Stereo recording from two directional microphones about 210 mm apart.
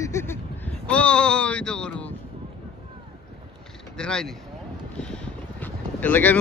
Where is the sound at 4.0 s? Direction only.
5° left (ahead or behind).